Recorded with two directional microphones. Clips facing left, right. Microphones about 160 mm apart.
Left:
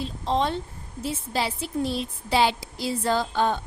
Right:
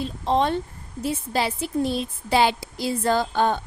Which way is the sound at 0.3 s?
55° right (ahead or behind).